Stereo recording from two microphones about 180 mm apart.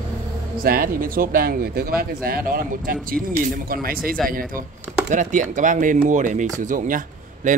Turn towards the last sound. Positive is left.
turn(degrees=-45)  # may be behind; listen again after turning